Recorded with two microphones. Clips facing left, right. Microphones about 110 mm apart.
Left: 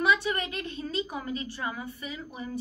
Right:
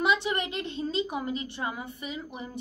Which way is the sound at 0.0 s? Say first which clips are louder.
Even; 20° right (ahead or behind).